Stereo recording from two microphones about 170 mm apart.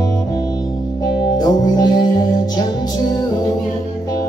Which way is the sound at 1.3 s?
25° left (ahead or behind).